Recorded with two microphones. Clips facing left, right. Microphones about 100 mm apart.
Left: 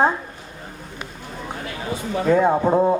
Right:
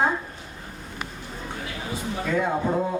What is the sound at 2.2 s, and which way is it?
Speech, 35° left (ahead or behind).